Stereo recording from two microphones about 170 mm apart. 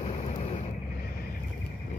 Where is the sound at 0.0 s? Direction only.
35° left (ahead or behind).